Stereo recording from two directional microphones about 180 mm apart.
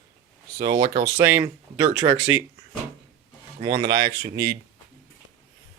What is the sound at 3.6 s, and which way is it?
Speech, 25° right (ahead or behind).